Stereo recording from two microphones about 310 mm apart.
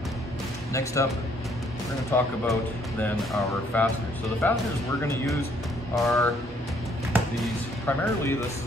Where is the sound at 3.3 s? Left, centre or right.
Centre.